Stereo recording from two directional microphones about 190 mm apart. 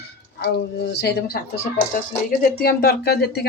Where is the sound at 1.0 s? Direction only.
60° left (ahead or behind).